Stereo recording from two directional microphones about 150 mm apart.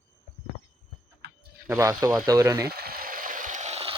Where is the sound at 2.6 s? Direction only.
90° right; by 3.9 s 45° right (ahead or behind).